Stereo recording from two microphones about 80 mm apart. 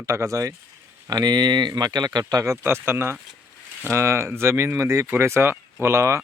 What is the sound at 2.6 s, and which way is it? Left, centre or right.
A man's voice, right.